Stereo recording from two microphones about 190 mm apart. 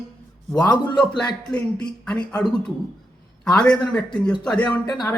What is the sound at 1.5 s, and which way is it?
Speech, 5° left (ahead or behind).